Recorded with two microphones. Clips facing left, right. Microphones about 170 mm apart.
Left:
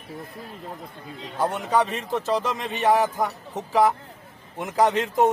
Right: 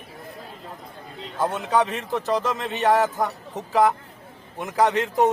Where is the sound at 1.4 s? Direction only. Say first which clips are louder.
Even; 15° left (ahead or behind).